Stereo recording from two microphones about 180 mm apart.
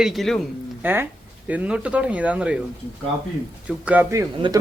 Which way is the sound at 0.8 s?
10° right (ahead or behind).